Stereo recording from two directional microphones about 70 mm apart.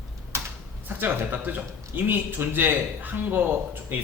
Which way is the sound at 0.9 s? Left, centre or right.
Right.